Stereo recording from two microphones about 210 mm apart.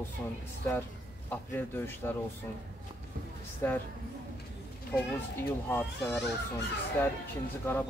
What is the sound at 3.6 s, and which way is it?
Speech, 10° left (ahead or behind).